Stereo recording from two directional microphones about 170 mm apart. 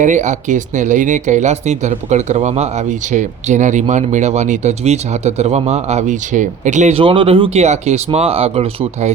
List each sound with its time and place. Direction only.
0.0 s speech: 45° right (ahead or behind)